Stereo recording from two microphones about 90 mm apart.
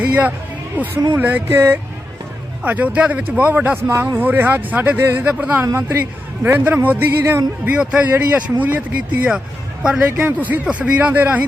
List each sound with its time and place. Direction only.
0.0 s speech: 15° right (ahead or behind)
2.6 s speech: 15° right (ahead or behind)
5.2 s speech: 15° right (ahead or behind)
5.6 s speech: 30° right (ahead or behind)
7.8 s speech: 10° right (ahead or behind)